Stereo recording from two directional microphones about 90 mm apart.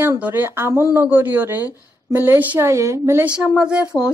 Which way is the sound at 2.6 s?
35° right (ahead or behind).